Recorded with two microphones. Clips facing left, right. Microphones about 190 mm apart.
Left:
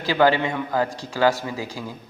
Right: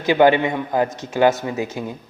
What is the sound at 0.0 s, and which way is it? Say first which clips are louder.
A man's voice: right 4 dB; 20° right (ahead or behind).